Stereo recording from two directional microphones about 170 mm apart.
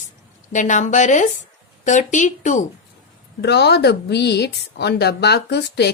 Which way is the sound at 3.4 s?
80° left.